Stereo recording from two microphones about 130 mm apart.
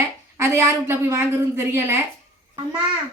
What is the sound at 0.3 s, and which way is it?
A woman's voice, 20° right (ahead or behind).